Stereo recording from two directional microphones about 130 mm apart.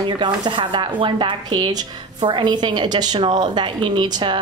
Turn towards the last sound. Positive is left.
turn(degrees=-35)  # may be behind; listen again after turning